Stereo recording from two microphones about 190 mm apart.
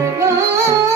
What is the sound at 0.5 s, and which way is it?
Music, 15° right (ahead or behind).